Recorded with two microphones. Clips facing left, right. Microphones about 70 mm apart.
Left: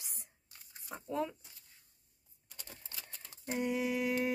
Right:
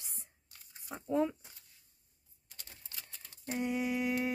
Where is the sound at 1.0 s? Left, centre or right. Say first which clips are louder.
Right 5 dB; centre.